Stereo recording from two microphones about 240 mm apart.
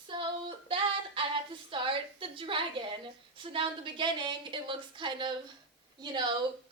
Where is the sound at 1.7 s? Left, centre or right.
Right.